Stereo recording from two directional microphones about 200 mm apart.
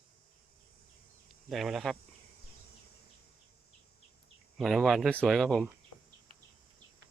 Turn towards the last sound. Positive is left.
turn(degrees=0)  # may be behind; listen again after turning